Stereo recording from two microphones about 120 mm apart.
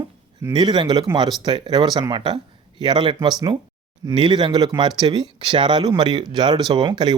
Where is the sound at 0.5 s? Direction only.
35° right (ahead or behind).